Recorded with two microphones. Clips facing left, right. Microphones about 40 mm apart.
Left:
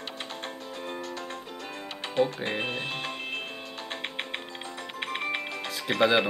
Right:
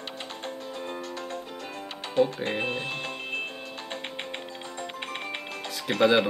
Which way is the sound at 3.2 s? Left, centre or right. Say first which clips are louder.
Right 2 dB; centre.